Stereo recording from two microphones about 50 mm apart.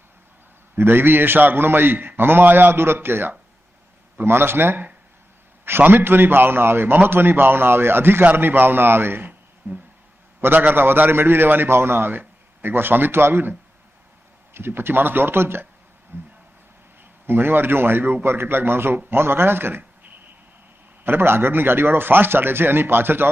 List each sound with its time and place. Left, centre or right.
0.8 s a man's voice: right
2.7 s a man's voice: right
21.0 s a man's voice: right